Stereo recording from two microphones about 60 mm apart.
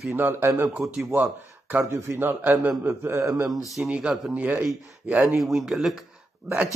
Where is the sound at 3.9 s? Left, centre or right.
Centre.